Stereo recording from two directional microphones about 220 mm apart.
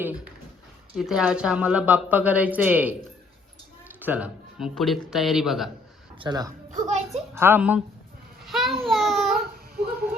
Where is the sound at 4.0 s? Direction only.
5° right (ahead or behind).